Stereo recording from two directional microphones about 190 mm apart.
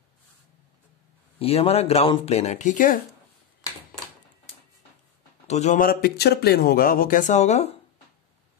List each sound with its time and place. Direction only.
1.4 s speech: 30° left (ahead or behind)
5.5 s speech: 35° left (ahead or behind)